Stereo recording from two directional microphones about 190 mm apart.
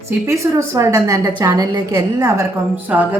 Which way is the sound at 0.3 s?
15° right (ahead or behind).